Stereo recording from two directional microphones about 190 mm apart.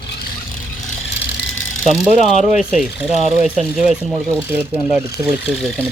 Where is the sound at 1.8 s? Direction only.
Centre (ahead or behind).